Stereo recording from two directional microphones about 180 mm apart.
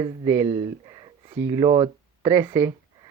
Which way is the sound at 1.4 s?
20° right (ahead or behind).